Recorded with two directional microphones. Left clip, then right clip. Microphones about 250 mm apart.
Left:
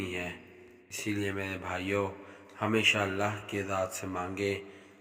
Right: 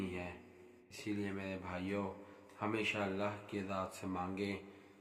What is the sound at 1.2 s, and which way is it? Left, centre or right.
Speech, left.